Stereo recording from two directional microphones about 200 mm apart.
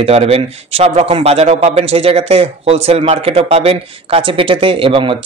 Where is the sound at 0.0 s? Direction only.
30° right (ahead or behind).